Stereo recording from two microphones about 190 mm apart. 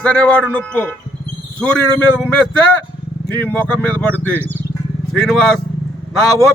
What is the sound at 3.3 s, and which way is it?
Speech, 10° left (ahead or behind).